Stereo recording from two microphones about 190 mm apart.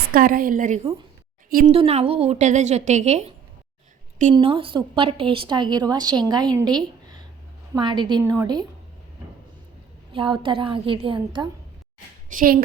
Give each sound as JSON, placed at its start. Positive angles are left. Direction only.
{"t": 0.1, "sound": "a woman's voice", "side_deg": -50}
{"t": 1.7, "sound": "a woman's voice", "side_deg": -30}
{"t": 4.4, "sound": "a woman's voice", "side_deg": -25}
{"t": 10.1, "sound": "a woman's voice", "side_deg": -25}
{"t": 12.3, "sound": "a woman's voice", "side_deg": -50}